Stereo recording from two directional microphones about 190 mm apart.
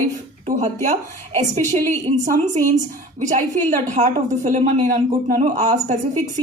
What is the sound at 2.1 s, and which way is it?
Speech, 40° right (ahead or behind).